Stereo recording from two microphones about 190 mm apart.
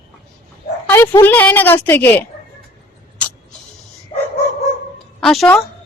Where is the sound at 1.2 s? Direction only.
10° left (ahead or behind).